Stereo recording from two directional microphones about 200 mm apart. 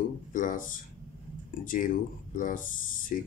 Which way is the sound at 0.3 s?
40° left (ahead or behind).